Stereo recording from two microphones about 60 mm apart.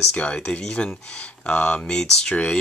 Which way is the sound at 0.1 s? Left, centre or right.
Centre.